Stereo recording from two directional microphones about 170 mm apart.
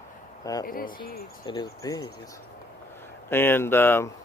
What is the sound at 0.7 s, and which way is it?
Speech, 55° left (ahead or behind).